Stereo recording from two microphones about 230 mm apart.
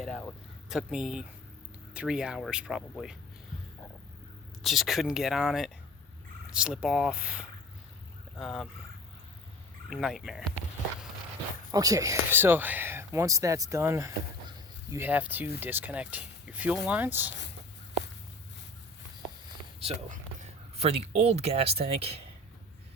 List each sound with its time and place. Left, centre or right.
0.0 s speech: centre
4.6 s speech: centre
9.9 s speech: centre
11.7 s speech: centre
20.7 s speech: right